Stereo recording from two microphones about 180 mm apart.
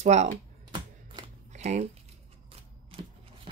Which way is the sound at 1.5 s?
40° right (ahead or behind).